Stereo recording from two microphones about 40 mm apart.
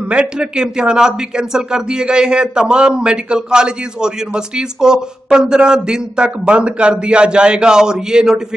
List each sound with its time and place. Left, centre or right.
0.1 s a man's voice: right